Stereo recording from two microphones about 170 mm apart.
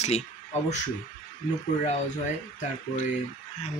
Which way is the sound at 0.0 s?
40° left (ahead or behind).